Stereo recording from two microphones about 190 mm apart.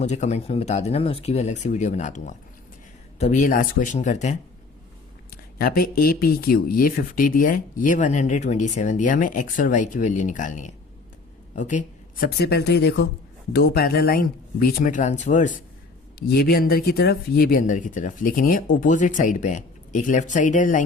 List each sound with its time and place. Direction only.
0.0 s speech: 35° left (ahead or behind)
5.5 s speech: 50° left (ahead or behind)
11.5 s a sound: 40° left (ahead or behind)
12.4 s speech: 60° left (ahead or behind); by 15.5 s 40° left (ahead or behind)
16.1 s speech: 55° left (ahead or behind)